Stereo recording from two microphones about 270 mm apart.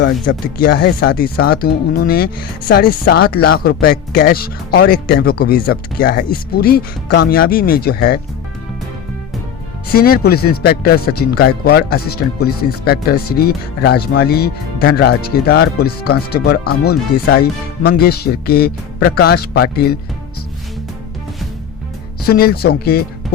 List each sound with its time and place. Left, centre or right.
0.0 s speech: left
9.9 s speech: left
22.3 s speech: left